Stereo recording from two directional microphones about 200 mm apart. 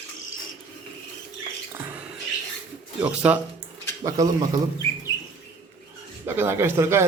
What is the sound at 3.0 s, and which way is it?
Speech, 10° right (ahead or behind).